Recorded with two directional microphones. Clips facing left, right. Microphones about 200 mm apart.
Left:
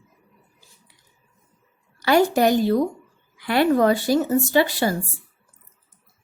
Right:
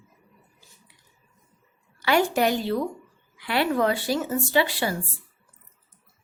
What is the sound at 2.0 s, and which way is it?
A woman's voice, 40° left (ahead or behind).